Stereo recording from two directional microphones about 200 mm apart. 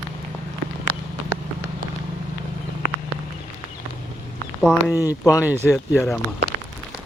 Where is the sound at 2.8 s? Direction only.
45° left (ahead or behind).